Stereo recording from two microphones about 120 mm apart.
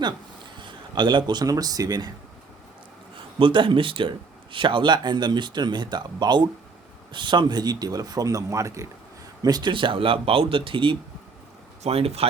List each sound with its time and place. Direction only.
0.6 s speech: 40° right (ahead or behind)
3.3 s speech: 45° right (ahead or behind); by 8.9 s 25° right (ahead or behind)
9.4 s speech: 35° right (ahead or behind)
11.8 s speech: 55° right (ahead or behind)